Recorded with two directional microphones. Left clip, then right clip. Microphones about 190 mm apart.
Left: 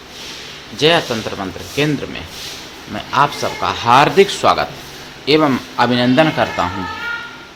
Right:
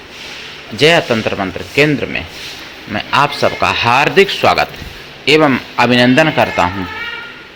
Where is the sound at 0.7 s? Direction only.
15° right (ahead or behind).